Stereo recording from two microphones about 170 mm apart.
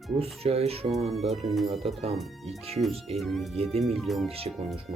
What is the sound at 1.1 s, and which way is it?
Speech, centre (ahead or behind).